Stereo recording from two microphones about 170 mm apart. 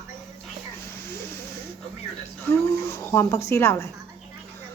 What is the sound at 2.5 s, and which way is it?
Speech, 15° left (ahead or behind).